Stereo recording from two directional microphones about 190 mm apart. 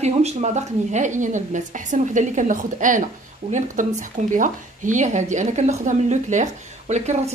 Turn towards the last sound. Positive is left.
turn(degrees=-35)  # may be behind; listen again after turning